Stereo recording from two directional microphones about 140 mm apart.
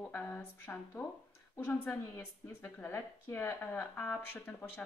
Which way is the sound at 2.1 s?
20° left (ahead or behind).